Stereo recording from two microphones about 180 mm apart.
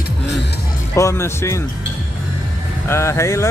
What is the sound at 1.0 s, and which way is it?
Speech, 15° left (ahead or behind).